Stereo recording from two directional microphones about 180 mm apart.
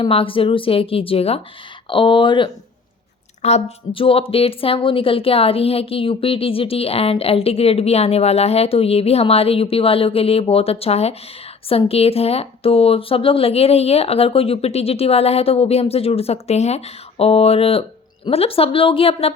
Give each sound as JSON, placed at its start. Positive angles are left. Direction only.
{"t": 0.0, "sound": "a woman's voice", "side_deg": 30}